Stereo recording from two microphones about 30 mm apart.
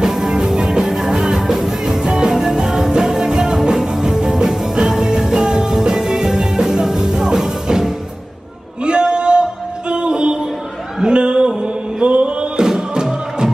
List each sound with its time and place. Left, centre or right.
0.0 s music: centre
1.1 s music: right
1.4 s music: centre
2.0 s music: right
8.8 s music: right
11.1 s mantra: right
12.5 s music: right